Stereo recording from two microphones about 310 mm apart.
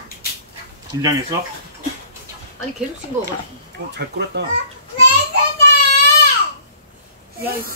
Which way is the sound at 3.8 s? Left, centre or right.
Right.